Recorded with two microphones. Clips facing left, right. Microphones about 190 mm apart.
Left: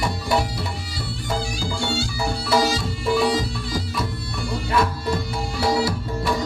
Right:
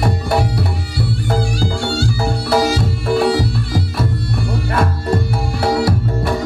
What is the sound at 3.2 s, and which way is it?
Music, 65° right (ahead or behind).